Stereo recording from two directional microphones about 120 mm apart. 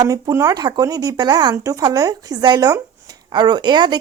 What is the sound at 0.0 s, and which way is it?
Speech, 30° right (ahead or behind).